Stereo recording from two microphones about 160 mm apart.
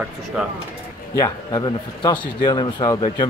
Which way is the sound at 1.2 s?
25° left (ahead or behind).